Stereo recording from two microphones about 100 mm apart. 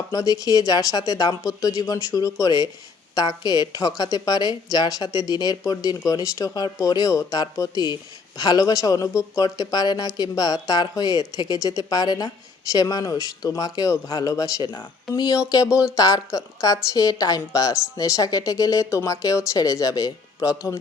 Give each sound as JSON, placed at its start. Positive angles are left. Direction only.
{"t": 0.1, "sound": "a woman's voice", "side_deg": 35}